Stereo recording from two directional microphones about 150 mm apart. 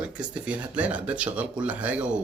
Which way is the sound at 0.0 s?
5° right (ahead or behind).